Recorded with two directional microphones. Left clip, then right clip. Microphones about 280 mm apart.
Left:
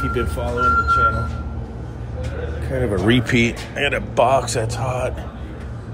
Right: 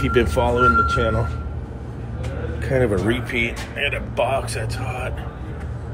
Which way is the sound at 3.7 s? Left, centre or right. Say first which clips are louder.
Left 3 dB; left.